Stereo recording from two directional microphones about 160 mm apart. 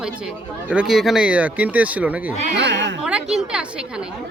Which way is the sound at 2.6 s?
90° right.